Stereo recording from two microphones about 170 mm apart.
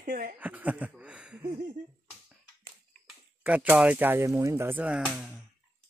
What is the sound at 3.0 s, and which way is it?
Speech, 10° right (ahead or behind).